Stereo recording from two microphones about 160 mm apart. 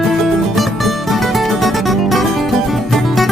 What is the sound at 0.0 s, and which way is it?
Music, centre (ahead or behind).